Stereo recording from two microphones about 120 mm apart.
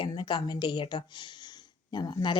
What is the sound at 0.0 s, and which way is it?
Speech, 40° left (ahead or behind).